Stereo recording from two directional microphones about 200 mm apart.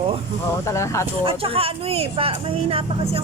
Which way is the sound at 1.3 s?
30° right (ahead or behind).